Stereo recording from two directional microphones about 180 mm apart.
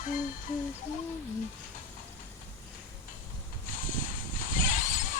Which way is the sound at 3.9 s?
45° left (ahead or behind).